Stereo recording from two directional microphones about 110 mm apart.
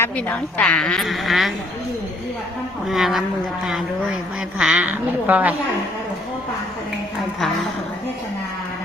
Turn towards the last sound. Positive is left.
turn(degrees=5)  # may be behind; listen again after turning